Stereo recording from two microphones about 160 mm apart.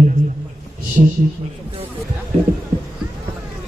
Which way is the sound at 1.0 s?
50° right (ahead or behind).